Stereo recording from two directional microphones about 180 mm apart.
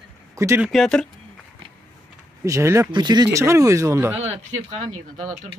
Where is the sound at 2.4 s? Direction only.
15° right (ahead or behind).